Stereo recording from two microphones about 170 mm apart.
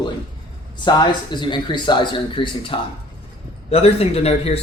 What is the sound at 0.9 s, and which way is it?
Speech, 25° left (ahead or behind).